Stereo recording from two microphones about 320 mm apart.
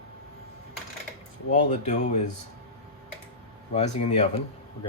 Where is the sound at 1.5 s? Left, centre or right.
Left.